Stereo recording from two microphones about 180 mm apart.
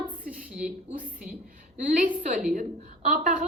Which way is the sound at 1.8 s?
40° right (ahead or behind).